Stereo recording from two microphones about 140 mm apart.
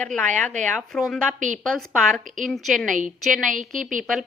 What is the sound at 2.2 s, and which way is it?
Speech, 70° right (ahead or behind).